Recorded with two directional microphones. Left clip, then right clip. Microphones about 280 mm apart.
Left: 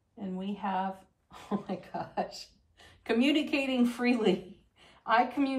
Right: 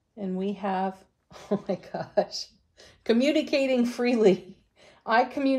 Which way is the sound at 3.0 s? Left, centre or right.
Right.